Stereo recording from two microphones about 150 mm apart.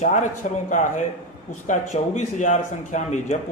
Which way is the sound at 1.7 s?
50° left (ahead or behind).